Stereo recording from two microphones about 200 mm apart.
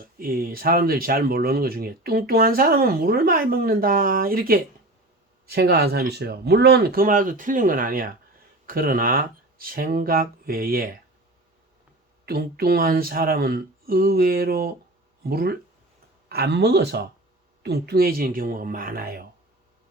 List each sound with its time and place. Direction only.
0.2 s speech: 45° right (ahead or behind)
12.2 s speech: 50° right (ahead or behind)